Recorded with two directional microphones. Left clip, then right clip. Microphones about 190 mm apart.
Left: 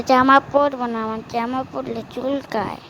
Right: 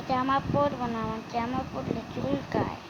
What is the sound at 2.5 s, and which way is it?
Speech, 55° left (ahead or behind).